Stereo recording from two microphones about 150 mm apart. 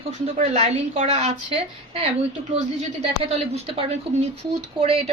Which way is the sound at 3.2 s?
45° right (ahead or behind).